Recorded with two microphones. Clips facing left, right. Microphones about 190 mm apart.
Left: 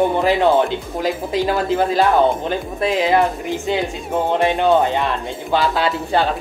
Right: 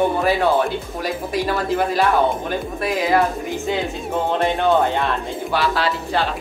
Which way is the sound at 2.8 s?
20° left (ahead or behind).